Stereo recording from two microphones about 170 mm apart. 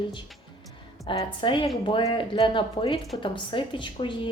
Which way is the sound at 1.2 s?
30° left (ahead or behind).